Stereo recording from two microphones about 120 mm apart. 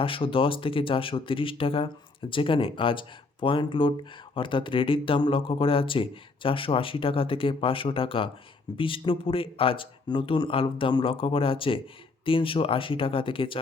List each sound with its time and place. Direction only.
0.0 s speech: 45° left (ahead or behind)